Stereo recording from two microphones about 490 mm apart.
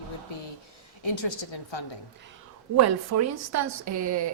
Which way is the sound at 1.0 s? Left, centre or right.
Left.